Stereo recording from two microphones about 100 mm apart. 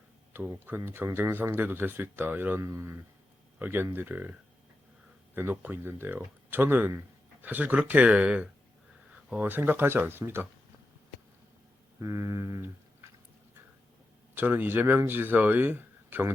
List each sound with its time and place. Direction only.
0.3 s speech: 25° right (ahead or behind)
2.6 s speech: 30° right (ahead or behind)
11.9 s a sound: 30° right (ahead or behind)
14.3 s speech: 20° right (ahead or behind)